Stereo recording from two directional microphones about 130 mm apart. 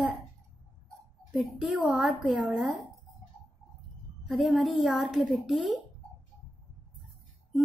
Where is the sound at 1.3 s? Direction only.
5° right (ahead or behind).